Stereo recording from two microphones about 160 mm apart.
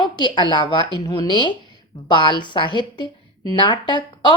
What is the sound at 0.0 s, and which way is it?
A woman's voice, 30° left (ahead or behind).